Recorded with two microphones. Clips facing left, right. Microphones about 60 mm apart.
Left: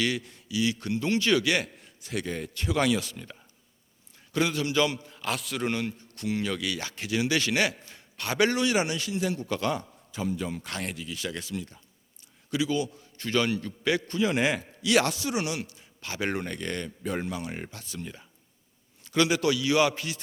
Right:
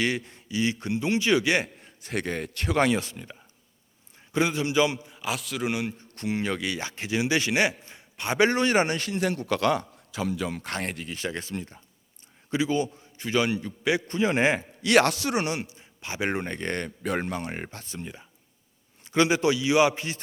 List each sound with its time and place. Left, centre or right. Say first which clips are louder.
0.0 s a man's voice: right 2 dB; right
2.0 s a man's voice: right 2 dB; right
2.7 s a man's voice: right 2 dB; right
4.3 s a man's voice: right 2 dB; right; by 5.7 s centre
6.1 s a man's voice: right 2 dB; right
10.6 s a man's voice: right 3 dB; right
13.1 s a man's voice: right 1 dB; centre
14.1 s a man's voice: right 4 dB; right
14.8 s speech: right 4 dB; right
15.4 s a man's voice: right 3 dB; right
15.6 s a man's voice: right 2 dB; right
17.0 s a man's voice: right 3 dB; right
17.2 s a man's voice: right 2 dB; right
18.0 s a man's voice: right 1 dB; centre